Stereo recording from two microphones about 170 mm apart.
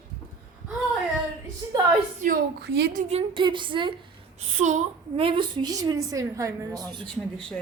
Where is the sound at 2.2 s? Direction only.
65° right (ahead or behind).